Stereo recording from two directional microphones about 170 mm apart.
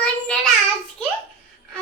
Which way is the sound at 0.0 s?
5° left (ahead or behind).